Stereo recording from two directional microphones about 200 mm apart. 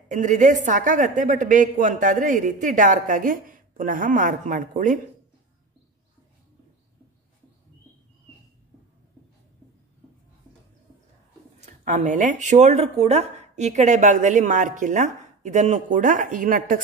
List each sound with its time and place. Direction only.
0.1 s speech: 40° right (ahead or behind)
11.6 s speech: 35° right (ahead or behind)